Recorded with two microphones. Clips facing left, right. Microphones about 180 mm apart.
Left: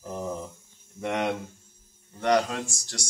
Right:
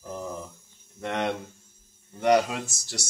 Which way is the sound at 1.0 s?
10° left (ahead or behind).